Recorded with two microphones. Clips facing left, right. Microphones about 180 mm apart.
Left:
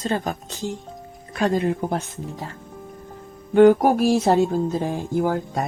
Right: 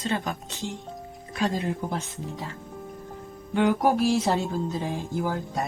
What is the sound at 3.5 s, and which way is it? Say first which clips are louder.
Speech: left 8 dB; 45° left (ahead or behind).